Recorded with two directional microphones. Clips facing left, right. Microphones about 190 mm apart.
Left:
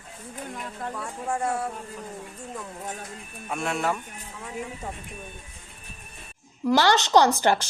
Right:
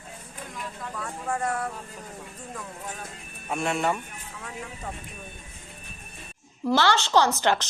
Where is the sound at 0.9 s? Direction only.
15° left (ahead or behind).